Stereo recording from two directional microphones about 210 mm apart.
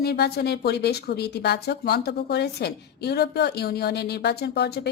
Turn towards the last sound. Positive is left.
turn(degrees=50)  # may be behind; listen again after turning